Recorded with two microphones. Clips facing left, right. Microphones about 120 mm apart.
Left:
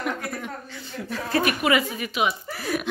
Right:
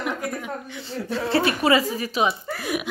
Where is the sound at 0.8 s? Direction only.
30° right (ahead or behind).